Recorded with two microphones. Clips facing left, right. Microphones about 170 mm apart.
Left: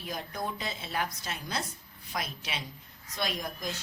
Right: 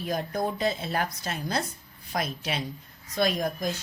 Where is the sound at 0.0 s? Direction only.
45° right (ahead or behind).